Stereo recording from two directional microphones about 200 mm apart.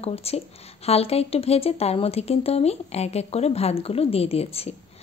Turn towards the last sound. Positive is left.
turn(degrees=30)  # may be behind; listen again after turning